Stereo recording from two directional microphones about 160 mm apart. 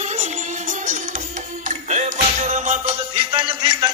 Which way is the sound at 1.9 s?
45° right (ahead or behind).